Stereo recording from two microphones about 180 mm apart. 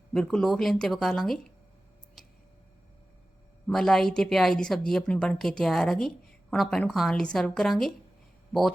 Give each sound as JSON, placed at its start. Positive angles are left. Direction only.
{"t": 0.1, "sound": "a woman's voice", "side_deg": 5}
{"t": 3.7, "sound": "a woman's voice", "side_deg": 0}